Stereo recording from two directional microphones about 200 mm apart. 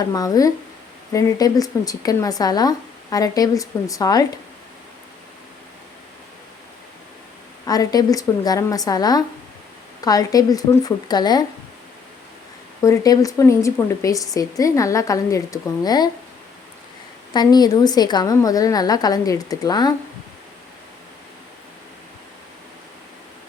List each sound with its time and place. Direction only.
0.0 s speech: 20° left (ahead or behind)
7.6 s a woman's voice: 20° left (ahead or behind)
12.8 s speech: 15° left (ahead or behind)
17.3 s a woman's voice: 20° left (ahead or behind)